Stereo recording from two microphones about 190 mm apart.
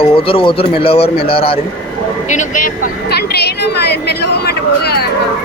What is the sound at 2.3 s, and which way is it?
A woman's voice, 40° left (ahead or behind).